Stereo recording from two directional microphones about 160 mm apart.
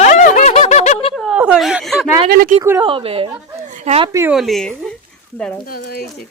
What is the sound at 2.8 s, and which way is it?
A woman's voice, 35° right (ahead or behind).